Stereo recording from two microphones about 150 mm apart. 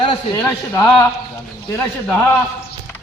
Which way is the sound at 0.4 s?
20° left (ahead or behind).